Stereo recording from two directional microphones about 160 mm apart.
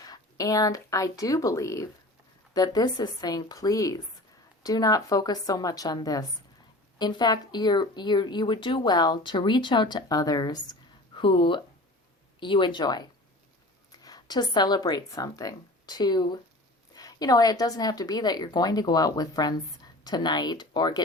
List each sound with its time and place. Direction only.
0.0 s a woman's voice: 25° left (ahead or behind)